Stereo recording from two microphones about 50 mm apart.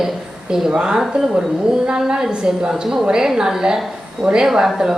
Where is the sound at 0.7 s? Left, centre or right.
Centre.